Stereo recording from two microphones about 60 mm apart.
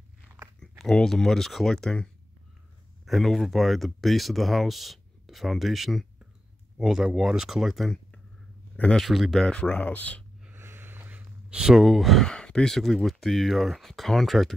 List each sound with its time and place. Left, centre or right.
0.6 s speech: centre
3.1 s speech: centre
9.0 s speech: centre
9.7 s speech: left
10.5 s a sound: right
11.5 s speech: centre
12.3 s speech: centre